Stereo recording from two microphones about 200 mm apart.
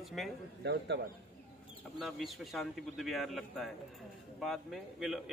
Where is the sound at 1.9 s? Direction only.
Centre (ahead or behind).